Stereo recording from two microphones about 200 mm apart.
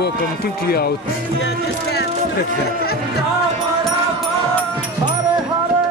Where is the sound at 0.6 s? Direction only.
50° left (ahead or behind).